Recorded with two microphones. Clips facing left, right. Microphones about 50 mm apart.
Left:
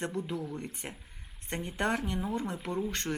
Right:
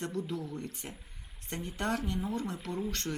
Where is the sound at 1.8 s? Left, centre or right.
Left.